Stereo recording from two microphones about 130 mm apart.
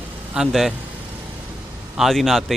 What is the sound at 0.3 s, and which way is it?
Speech, centre (ahead or behind).